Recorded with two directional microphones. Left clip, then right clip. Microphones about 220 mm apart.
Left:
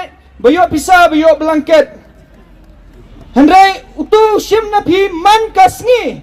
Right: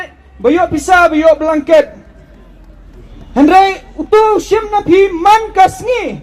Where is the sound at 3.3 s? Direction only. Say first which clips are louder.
Left 2 dB; 15° left (ahead or behind).